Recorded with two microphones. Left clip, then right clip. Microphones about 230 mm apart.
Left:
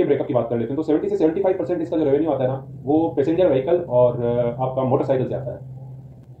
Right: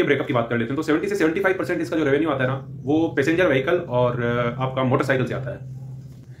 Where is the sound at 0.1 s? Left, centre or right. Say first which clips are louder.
Left 1 dB; right.